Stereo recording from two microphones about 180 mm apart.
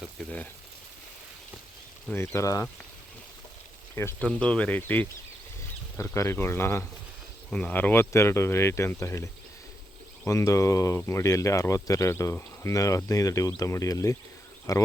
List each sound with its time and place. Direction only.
2.0 s speech: 15° left (ahead or behind)
3.9 s speech: 15° left (ahead or behind)